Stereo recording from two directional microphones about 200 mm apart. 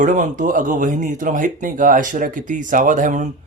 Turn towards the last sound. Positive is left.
turn(degrees=-40)  # may be behind; listen again after turning